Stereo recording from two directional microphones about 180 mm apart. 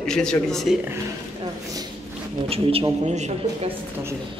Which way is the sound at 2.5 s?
30° right (ahead or behind).